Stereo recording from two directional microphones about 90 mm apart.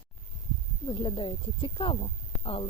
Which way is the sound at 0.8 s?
75° left (ahead or behind).